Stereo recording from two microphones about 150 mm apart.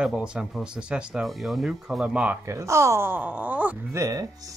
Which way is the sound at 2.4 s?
20° right (ahead or behind).